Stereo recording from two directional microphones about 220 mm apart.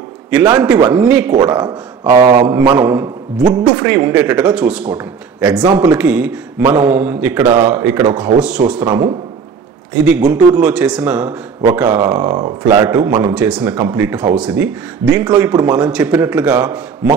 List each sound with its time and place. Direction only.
0.8 s speech: 5° right (ahead or behind)
1.4 s a man's voice: 20° right (ahead or behind)
5.6 s speech: 20° right (ahead or behind)
5.9 s a man's voice: 5° right (ahead or behind)
8.8 s speech: 15° right (ahead or behind)
10.0 s a man's voice: 5° right (ahead or behind)